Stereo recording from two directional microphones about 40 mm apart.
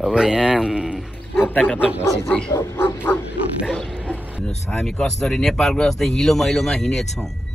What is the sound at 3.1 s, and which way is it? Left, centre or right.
Speech, left.